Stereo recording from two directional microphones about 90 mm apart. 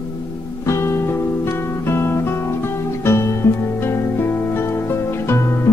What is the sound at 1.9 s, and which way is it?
Music, 25° left (ahead or behind).